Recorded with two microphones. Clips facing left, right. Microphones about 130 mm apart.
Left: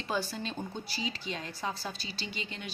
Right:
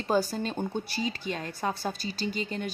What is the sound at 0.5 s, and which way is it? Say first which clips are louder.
Speech: right 7 dB; 60° right (ahead or behind).